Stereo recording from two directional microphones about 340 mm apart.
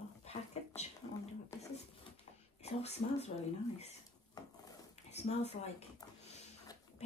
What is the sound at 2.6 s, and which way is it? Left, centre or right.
Speech, centre.